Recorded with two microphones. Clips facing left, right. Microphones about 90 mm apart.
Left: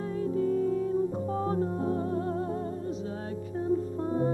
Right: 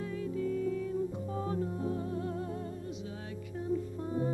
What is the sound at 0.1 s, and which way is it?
Music, 40° left (ahead or behind).